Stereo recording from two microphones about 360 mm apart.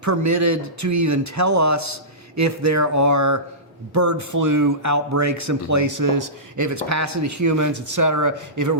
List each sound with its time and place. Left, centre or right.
0.0 s speech: right